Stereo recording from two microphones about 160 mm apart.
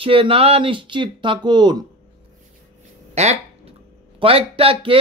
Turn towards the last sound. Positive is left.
turn(degrees=-35)  # may be behind; listen again after turning